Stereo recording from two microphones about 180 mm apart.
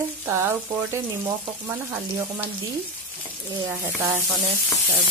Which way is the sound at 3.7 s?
20° right (ahead or behind).